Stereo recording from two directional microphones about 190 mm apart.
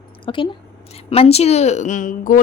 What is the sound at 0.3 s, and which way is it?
Speech, 25° left (ahead or behind).